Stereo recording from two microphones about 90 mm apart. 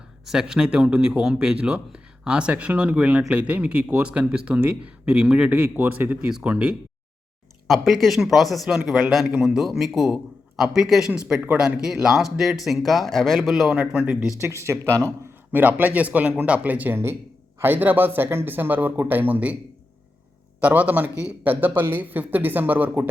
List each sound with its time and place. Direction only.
0.3 s speech: 5° right (ahead or behind)
6.2 s speech: 10° right (ahead or behind)
13.7 s speech: 15° right (ahead or behind)
14.4 s speech: 30° right (ahead or behind)
15.5 s speech: 20° right (ahead or behind)
20.6 s speech: 15° right (ahead or behind)